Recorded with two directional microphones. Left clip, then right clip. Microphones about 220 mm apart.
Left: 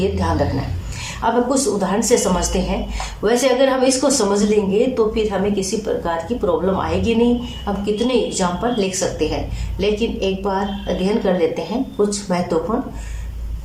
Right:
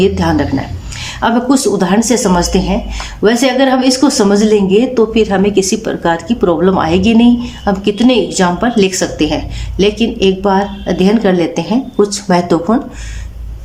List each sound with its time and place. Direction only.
0.0 s a woman's voice: 40° right (ahead or behind)